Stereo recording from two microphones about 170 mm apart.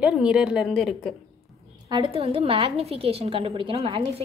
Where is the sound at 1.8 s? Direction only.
30° right (ahead or behind).